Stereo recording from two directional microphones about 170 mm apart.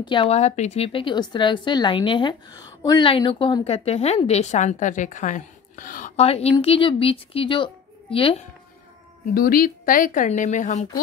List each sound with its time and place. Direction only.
0.0 s a woman's voice: 30° left (ahead or behind)
9.3 s a woman's voice: 60° left (ahead or behind)